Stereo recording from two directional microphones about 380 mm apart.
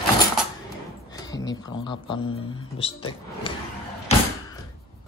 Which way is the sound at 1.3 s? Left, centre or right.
Centre.